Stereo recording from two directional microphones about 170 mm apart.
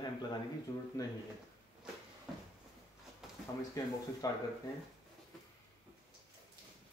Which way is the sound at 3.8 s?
20° left (ahead or behind).